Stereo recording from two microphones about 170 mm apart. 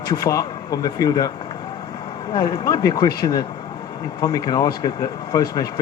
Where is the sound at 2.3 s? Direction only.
20° left (ahead or behind).